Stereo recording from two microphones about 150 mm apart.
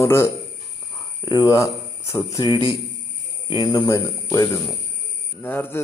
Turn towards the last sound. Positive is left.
turn(degrees=15)  # may be behind; listen again after turning